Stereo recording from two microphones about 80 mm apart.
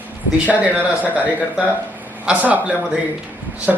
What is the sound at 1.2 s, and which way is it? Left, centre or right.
Speech, left.